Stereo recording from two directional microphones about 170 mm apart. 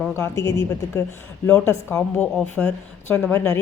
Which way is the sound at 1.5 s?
10° left (ahead or behind).